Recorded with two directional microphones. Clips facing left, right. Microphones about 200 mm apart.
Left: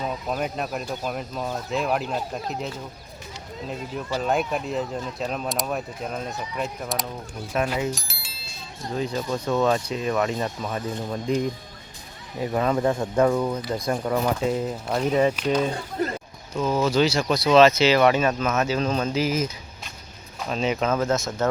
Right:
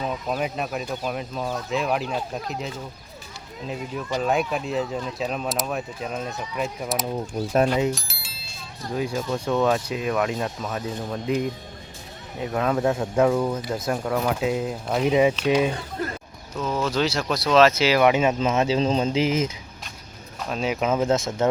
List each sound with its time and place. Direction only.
0.0 s speech: 5° right (ahead or behind)
4.2 s speech: centre (ahead or behind)
7.9 s bicycle bell: centre (ahead or behind)
9.3 s speech: centre (ahead or behind)
16.6 s speech: 5° left (ahead or behind); by 19.5 s 25° right (ahead or behind)
20.4 s speech: centre (ahead or behind)
21.1 s speech: 25° right (ahead or behind)